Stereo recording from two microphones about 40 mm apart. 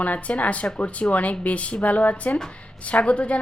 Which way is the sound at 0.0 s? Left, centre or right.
Left.